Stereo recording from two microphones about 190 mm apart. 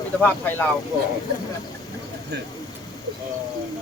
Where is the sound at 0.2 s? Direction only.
10° left (ahead or behind).